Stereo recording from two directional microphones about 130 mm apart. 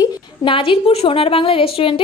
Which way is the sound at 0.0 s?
40° left (ahead or behind).